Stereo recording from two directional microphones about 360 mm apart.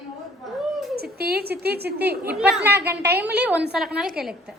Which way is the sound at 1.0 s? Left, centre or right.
Right.